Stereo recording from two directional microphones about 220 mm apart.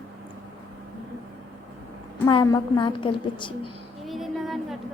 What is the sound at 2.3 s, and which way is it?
A woman's voice, 20° left (ahead or behind).